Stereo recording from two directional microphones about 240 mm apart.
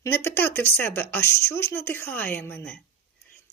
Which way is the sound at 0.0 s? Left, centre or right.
Centre.